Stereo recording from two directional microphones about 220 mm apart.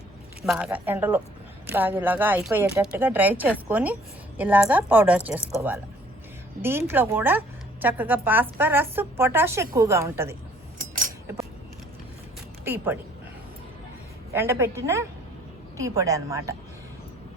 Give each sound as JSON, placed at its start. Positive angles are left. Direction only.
{"t": 0.4, "sound": "a woman's voice", "side_deg": -5}
{"t": 10.8, "sound": "a sound", "side_deg": -40}
{"t": 12.6, "sound": "a woman's voice", "side_deg": -10}
{"t": 14.3, "sound": "a woman's voice", "side_deg": -10}